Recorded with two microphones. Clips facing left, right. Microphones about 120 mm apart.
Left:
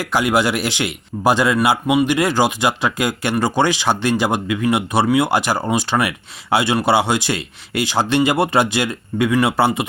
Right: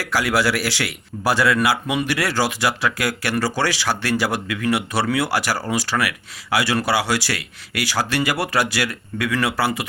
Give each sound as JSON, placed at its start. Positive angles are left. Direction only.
{"t": 0.0, "sound": "speech", "side_deg": 20}